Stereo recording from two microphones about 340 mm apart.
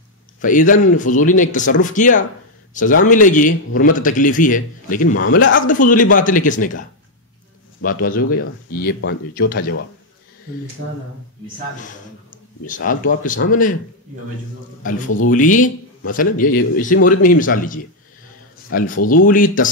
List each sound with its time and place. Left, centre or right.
0.4 s a man's voice: left
5.0 s a man's voice: left
8.6 s a man's voice: left
11.8 s a man's voice: left
15.3 s a man's voice: left